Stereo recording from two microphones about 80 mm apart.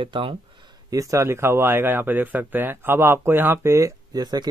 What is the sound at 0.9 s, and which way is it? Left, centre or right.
Speech, right.